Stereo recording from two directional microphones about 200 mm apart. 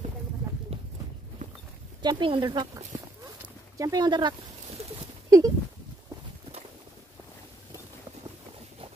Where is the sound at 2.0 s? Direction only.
25° right (ahead or behind).